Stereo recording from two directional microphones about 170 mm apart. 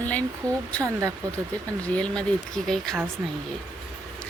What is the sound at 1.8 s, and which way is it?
A woman's voice, 5° left (ahead or behind).